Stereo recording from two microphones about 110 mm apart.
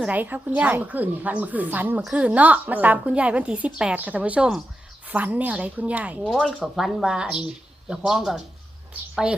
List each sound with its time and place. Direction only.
0.0 s a woman's voice: 15° right (ahead or behind)